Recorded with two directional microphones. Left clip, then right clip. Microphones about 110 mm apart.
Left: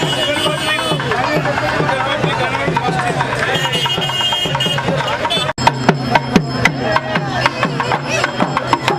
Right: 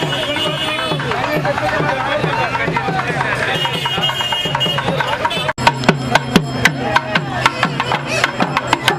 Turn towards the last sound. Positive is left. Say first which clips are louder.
# even
turn(degrees=-50)  # may be behind; listen again after turning